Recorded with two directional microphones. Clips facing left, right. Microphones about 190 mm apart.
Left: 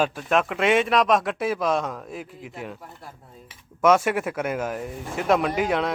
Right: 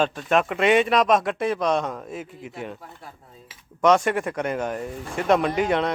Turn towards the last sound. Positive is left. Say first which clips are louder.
# right 1 dB
turn(degrees=0)  # may be behind; listen again after turning